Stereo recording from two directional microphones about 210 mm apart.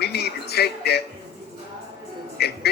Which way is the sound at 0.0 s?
50° left (ahead or behind).